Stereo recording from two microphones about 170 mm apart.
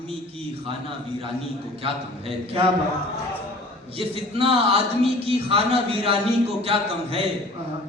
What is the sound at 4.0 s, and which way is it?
A man's voice, 35° right (ahead or behind).